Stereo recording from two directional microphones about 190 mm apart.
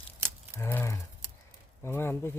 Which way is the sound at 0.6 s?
15° left (ahead or behind).